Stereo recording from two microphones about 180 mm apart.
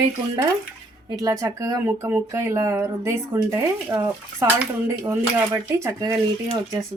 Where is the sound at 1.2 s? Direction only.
20° right (ahead or behind).